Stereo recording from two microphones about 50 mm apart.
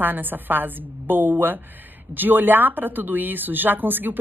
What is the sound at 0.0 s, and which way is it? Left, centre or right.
Speech, right.